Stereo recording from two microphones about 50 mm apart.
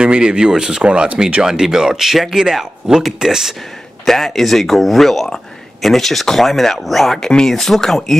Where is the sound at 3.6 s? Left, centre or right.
Centre.